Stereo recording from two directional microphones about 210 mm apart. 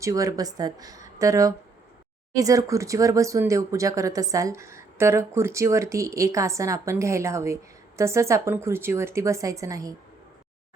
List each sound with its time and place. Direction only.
0.0 s speech: 15° right (ahead or behind)